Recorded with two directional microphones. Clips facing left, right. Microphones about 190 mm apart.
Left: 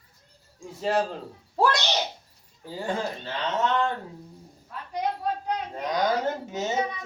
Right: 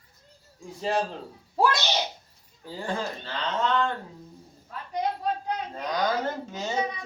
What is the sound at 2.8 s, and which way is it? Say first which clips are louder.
Speech: left 2 dB; 20° left (ahead or behind).